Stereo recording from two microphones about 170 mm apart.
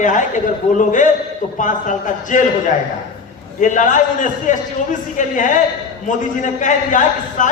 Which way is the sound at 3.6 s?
50° left (ahead or behind).